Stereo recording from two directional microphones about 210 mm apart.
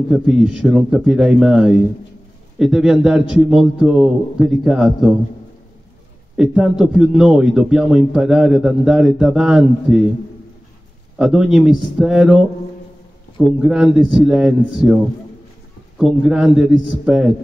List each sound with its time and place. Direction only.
0.1 s a man's voice: centre (ahead or behind)
6.3 s a man's voice: 5° right (ahead or behind)
11.1 s a man's voice: 5° right (ahead or behind)
16.0 s a man's voice: centre (ahead or behind)